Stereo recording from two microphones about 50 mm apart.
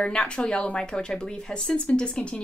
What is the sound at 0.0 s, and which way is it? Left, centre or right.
Speech, centre.